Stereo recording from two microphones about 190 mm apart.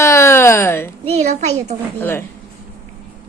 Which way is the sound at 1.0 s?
35° right (ahead or behind).